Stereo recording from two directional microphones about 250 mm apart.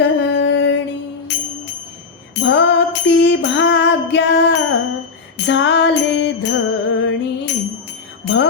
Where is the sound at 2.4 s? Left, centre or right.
Left.